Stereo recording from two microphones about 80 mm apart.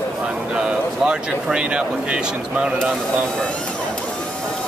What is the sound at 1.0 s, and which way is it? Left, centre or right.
Speech, centre.